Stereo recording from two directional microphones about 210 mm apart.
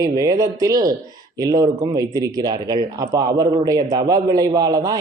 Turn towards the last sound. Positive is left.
turn(degrees=-15)  # may be behind; listen again after turning